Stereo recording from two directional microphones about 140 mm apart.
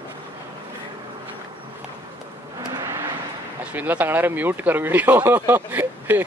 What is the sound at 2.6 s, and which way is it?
Vehicle, 25° right (ahead or behind).